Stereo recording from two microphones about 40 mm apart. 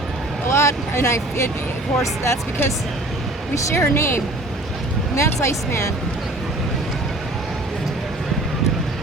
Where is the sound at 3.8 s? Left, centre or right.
Left.